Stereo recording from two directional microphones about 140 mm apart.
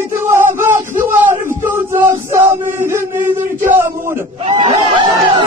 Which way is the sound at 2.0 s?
20° right (ahead or behind).